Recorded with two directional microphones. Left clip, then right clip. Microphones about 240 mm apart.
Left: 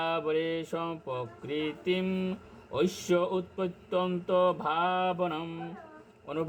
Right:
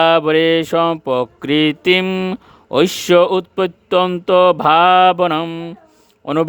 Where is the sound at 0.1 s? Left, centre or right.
Right.